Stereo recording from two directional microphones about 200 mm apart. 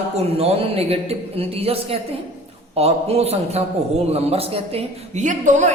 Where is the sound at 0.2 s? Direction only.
30° right (ahead or behind).